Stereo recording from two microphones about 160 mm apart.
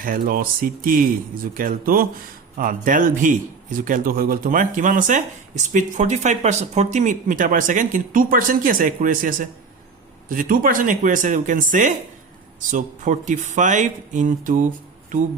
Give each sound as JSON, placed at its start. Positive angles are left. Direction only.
{"t": 0.0, "sound": "a man's voice", "side_deg": -60}